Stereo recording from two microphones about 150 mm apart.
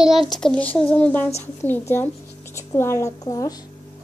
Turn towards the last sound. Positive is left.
turn(degrees=20)  # may be behind; listen again after turning